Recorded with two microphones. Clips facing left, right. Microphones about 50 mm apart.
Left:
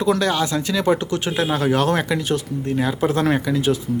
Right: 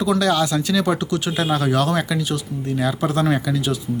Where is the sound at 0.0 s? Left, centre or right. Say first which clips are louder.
Right 1 dB; left.